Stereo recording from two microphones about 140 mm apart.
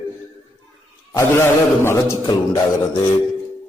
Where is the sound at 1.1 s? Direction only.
20° left (ahead or behind).